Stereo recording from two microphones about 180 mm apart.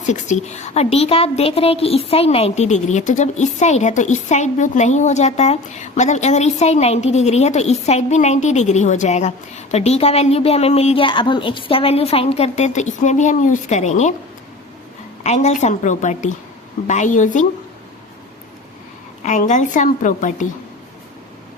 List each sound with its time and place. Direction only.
0.0 s a woman's voice: 40° left (ahead or behind)
15.2 s a woman's voice: 40° left (ahead or behind)
19.2 s a woman's voice: 40° left (ahead or behind)